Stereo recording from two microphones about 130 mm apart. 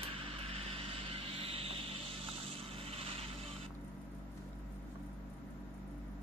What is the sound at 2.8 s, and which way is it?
Mechanisms, 50° right (ahead or behind).